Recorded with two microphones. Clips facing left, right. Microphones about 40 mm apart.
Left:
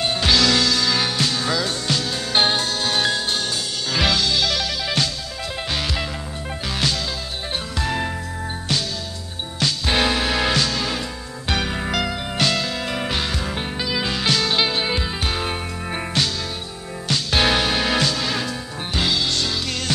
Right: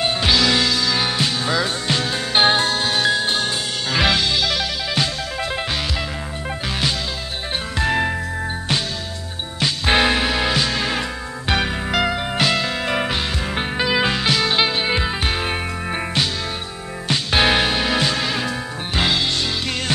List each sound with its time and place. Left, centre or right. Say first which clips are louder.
0.0 s music: right 1 dB; centre
2.8 s music: right 2 dB; centre
3.9 s music: right 2 dB; centre
7.8 s music: right 5 dB; right
9.9 s music: right 2 dB; centre
10.7 s music: right 3 dB; right
11.7 s music: right 2 dB; centre
12.0 s music: right 5 dB; centre
13.6 s music: right 9 dB; right
14.1 s music: right 2 dB; centre
18.9 s music: right 2 dB; right